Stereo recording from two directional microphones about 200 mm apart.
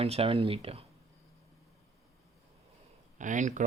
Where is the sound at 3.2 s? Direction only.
40° right (ahead or behind).